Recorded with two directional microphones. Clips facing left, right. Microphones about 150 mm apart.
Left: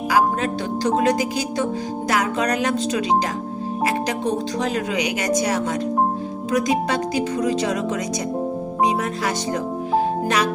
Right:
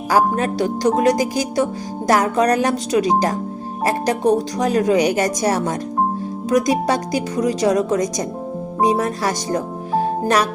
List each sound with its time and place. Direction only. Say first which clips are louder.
0.1 s speech: right 3 dB; 40° right (ahead or behind)